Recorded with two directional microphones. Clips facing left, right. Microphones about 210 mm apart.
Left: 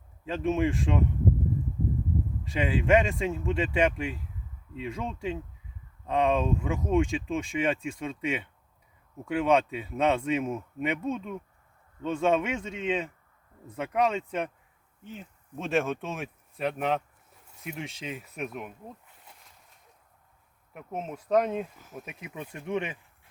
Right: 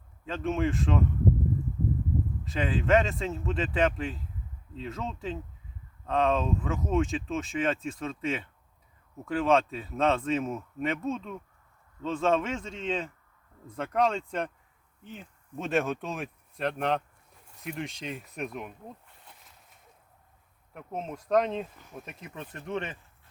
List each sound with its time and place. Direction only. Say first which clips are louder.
0.3 s speech: left 2 dB; 15° left (ahead or behind)
2.5 s speech: left 1 dB; 15° left (ahead or behind)
20.7 s speech: left 1 dB; 5° left (ahead or behind)